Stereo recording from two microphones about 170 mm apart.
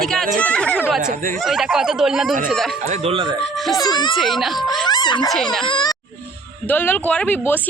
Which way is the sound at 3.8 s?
25° left (ahead or behind).